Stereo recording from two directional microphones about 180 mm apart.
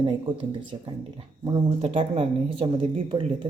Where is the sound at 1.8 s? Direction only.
35° right (ahead or behind).